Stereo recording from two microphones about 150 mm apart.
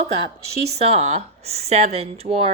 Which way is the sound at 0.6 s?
45° right (ahead or behind).